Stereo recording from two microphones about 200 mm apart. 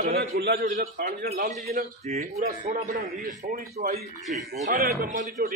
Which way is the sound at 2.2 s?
35° right (ahead or behind).